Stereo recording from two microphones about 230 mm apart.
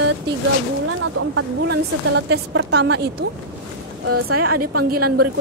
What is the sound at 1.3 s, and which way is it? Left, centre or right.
A woman's voice, right.